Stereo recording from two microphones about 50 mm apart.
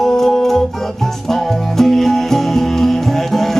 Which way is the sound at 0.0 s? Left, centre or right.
Centre.